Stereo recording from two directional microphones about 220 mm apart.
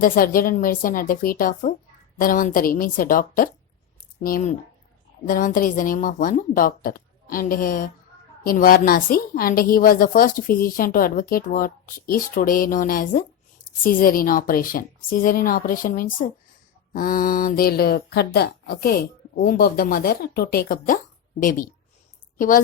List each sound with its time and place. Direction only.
0.0 s a woman's voice: 40° left (ahead or behind)